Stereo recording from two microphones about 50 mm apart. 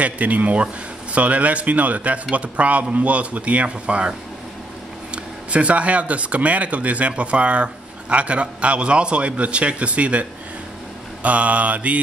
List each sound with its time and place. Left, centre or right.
0.0 s speech: right
5.1 s speech: right
11.2 s speech: right